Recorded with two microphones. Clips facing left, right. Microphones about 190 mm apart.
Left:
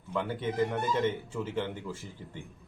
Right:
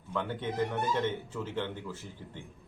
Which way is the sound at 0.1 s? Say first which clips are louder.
Left 2 dB; 10° left (ahead or behind).